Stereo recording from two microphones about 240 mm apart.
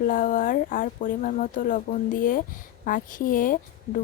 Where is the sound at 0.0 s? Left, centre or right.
Left.